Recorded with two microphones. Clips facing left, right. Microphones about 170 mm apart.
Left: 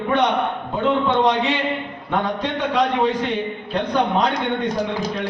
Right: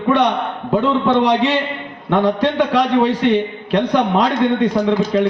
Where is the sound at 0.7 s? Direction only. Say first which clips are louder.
Right 5 dB; 90° right.